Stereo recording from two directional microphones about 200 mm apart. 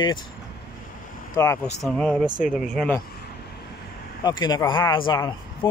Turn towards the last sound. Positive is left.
turn(degrees=20)  # may be behind; listen again after turning